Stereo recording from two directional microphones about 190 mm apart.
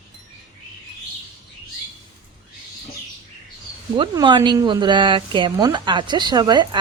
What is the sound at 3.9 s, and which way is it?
Speech, 25° right (ahead or behind).